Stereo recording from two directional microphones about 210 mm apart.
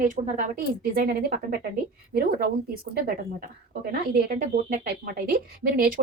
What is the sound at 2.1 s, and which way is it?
Speech, 45° right (ahead or behind).